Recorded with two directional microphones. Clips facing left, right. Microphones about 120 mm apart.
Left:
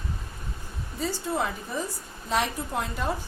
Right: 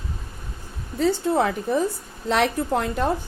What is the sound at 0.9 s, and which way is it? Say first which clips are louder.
A woman's voice: right 8 dB; 65° right (ahead or behind).